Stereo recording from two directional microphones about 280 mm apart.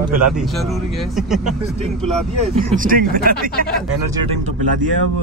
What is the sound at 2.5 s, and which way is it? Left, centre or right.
Speech, right.